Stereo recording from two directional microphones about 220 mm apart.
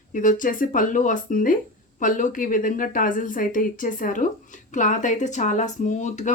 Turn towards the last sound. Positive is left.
turn(degrees=35)  # may be behind; listen again after turning